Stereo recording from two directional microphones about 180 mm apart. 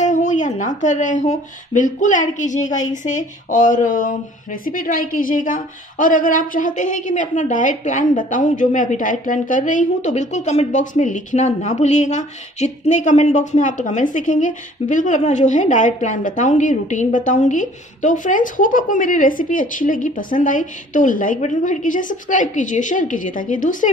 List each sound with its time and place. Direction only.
0.0 s a woman's voice: 40° left (ahead or behind)